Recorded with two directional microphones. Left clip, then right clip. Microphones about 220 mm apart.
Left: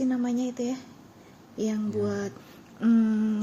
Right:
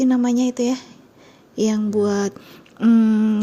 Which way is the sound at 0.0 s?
45° right (ahead or behind).